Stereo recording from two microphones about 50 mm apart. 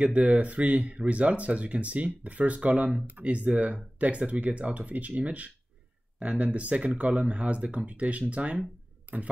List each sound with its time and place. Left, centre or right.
0.0 s speech: right